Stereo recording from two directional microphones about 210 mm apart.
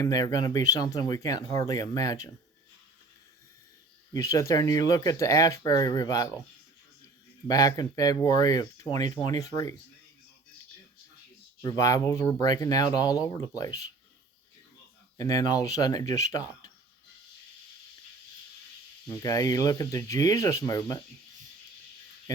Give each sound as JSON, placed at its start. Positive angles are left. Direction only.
{"t": 0.0, "sound": "speech", "side_deg": 15}
{"t": 4.1, "sound": "speech", "side_deg": 15}
{"t": 7.4, "sound": "speech", "side_deg": 20}
{"t": 11.6, "sound": "speech", "side_deg": 15}
{"t": 15.2, "sound": "speech", "side_deg": 15}
{"t": 19.0, "sound": "speech", "side_deg": 15}